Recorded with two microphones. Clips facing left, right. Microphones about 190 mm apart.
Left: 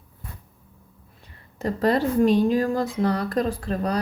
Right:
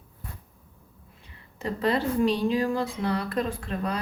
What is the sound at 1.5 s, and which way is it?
Speech, 45° left (ahead or behind).